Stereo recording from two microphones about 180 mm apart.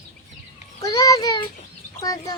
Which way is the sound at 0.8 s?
20° left (ahead or behind).